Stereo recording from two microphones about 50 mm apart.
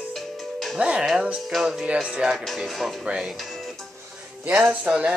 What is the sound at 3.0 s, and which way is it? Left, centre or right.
Speech, centre.